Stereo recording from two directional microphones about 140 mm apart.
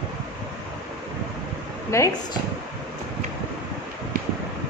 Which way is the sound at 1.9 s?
20° left (ahead or behind).